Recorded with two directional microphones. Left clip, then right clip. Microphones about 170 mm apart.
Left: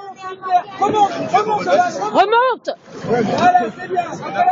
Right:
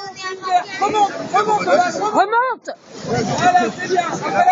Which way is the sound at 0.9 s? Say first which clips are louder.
Left 2 dB; 35° left (ahead or behind).